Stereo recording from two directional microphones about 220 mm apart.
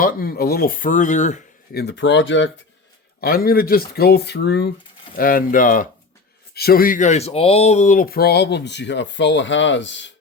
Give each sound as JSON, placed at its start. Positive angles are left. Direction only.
{"t": 0.0, "sound": "speech", "side_deg": 45}
{"t": 1.8, "sound": "speech", "side_deg": 50}
{"t": 3.2, "sound": "speech", "side_deg": 40}